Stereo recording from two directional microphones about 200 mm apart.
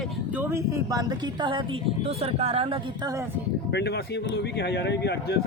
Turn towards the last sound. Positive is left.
turn(degrees=55)  # may be behind; listen again after turning